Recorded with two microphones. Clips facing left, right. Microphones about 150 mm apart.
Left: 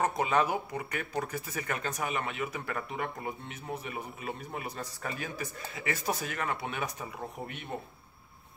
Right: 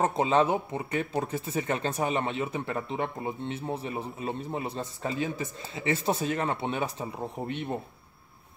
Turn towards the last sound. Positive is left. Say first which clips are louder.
# right 6 dB
turn(degrees=-30)  # may be behind; listen again after turning